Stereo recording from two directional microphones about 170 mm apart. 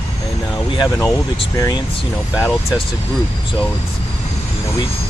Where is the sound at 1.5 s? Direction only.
20° left (ahead or behind).